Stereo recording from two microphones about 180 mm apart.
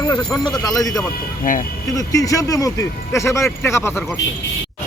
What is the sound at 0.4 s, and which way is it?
Speech, 20° left (ahead or behind).